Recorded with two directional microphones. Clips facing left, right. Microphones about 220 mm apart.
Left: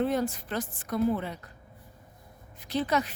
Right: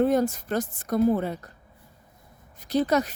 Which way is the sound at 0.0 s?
45° right (ahead or behind).